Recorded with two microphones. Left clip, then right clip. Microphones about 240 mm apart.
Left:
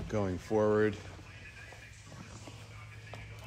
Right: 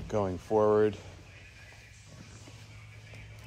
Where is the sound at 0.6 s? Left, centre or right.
Right.